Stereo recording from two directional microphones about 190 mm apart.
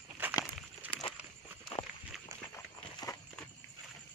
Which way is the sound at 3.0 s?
20° left (ahead or behind).